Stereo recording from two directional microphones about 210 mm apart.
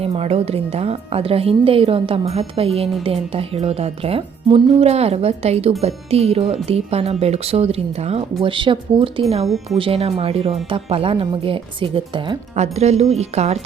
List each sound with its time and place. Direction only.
0.0 s speech: 30° right (ahead or behind)